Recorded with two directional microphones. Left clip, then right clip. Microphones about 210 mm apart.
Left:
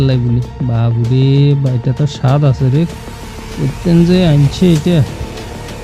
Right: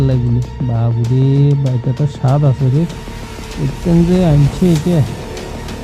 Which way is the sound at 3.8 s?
25° left (ahead or behind).